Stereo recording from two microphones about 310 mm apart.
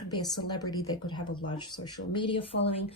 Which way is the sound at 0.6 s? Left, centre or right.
Left.